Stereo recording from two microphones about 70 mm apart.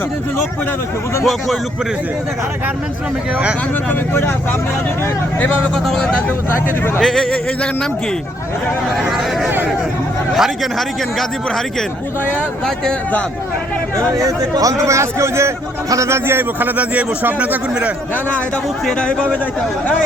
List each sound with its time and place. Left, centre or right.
1.2 s speech: centre
5.7 s speech: centre
10.3 s speech: centre
13.9 s a man's voice: right
18.3 s a man's voice: centre